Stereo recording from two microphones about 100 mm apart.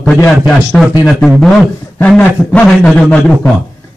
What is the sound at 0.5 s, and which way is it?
Speech, 5° left (ahead or behind).